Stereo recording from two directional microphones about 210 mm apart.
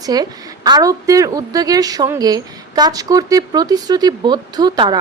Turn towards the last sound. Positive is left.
turn(degrees=-20)  # may be behind; listen again after turning